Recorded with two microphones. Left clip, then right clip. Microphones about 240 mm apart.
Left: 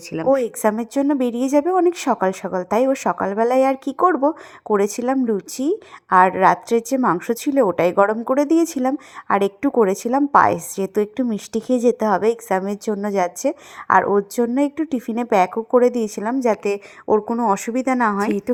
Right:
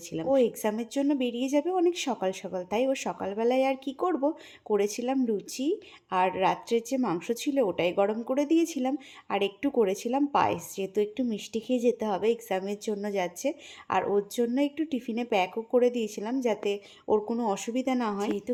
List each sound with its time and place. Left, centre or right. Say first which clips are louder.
0.3 s a woman's voice: left 8 dB; left